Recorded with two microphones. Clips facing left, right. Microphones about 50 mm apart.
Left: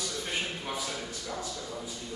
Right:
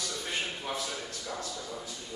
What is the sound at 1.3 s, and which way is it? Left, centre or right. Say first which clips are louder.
Speech: left 1 dB; centre.